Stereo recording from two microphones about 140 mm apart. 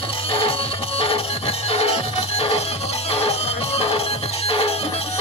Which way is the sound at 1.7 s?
45° left (ahead or behind).